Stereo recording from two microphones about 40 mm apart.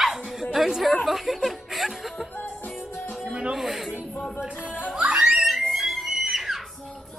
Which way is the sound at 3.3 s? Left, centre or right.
Right.